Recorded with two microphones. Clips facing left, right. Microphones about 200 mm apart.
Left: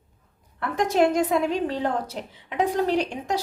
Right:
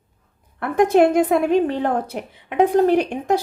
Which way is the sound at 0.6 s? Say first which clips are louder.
Right 6 dB; 55° right (ahead or behind).